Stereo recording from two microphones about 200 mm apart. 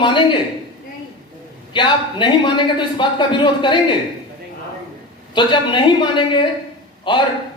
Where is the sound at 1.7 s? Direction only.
25° left (ahead or behind).